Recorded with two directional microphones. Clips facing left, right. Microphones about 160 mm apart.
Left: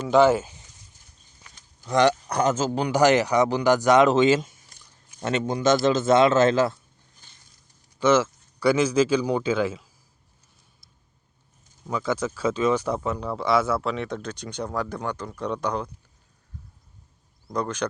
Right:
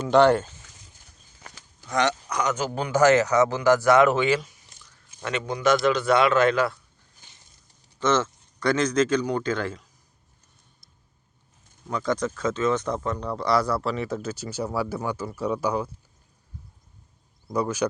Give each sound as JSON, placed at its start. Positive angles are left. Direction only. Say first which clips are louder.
{"t": 0.1, "sound": "speech", "louder": "even", "side_deg": 0}
{"t": 1.9, "sound": "speech", "louder": "left 5 dB", "side_deg": 35}
{"t": 7.9, "sound": "speech", "louder": "left 4 dB", "side_deg": 10}
{"t": 11.9, "sound": "speech", "louder": "even", "side_deg": 5}
{"t": 17.5, "sound": "speech", "louder": "right 2 dB", "side_deg": -10}